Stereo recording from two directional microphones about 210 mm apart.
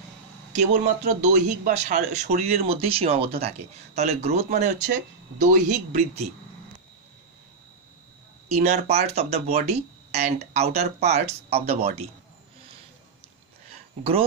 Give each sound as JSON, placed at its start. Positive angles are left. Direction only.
{"t": 0.5, "sound": "a man's voice", "side_deg": -35}
{"t": 8.5, "sound": "a man's voice", "side_deg": -30}